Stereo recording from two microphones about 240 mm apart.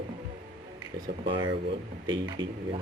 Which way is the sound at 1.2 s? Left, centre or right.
Right.